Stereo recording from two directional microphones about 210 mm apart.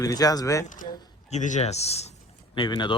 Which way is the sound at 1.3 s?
35° left (ahead or behind).